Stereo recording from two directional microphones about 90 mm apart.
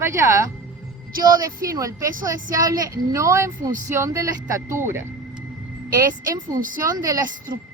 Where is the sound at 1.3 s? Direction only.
45° right (ahead or behind).